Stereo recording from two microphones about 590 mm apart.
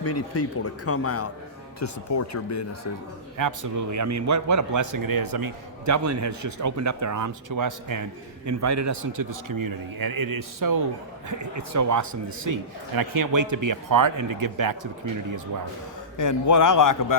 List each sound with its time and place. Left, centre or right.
0.0 s speech: left
3.3 s a man's voice: right
16.1 s a man's voice: left